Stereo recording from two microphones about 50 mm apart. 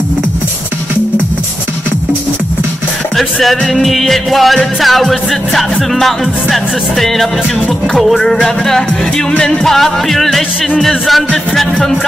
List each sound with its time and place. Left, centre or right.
3.2 s music: centre
7.9 s speech: centre
9.7 s music: centre